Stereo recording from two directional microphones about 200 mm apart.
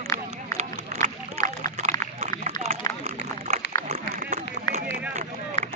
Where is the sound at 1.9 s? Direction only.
20° left (ahead or behind).